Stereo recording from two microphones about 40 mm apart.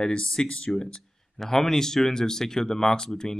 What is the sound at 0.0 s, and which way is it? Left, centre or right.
Speech, centre.